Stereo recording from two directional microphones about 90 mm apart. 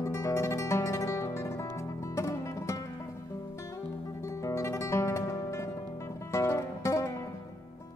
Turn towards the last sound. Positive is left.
turn(degrees=35)  # may be behind; listen again after turning